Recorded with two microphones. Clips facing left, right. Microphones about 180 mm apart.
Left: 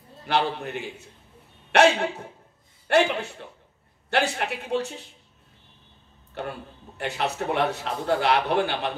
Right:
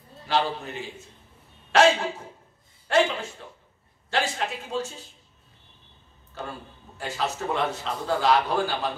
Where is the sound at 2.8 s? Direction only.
60° left (ahead or behind).